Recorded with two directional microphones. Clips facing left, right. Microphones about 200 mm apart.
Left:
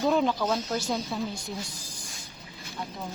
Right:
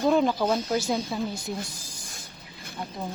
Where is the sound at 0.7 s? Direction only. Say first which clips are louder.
Right 3 dB; 5° right (ahead or behind).